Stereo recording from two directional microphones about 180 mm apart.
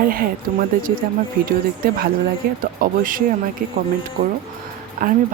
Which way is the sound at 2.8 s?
50° right (ahead or behind).